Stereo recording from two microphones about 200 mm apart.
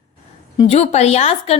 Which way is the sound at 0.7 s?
30° left (ahead or behind).